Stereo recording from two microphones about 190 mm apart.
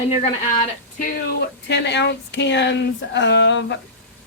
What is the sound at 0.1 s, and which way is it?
Speech, 35° left (ahead or behind).